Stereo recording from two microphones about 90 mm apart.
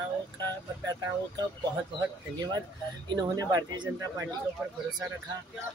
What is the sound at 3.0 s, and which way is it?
Speech, 45° right (ahead or behind).